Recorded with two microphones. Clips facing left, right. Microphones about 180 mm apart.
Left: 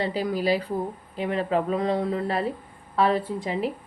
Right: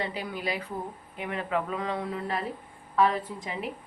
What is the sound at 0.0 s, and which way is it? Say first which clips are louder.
A woman's voice: left 8 dB; 35° left (ahead or behind).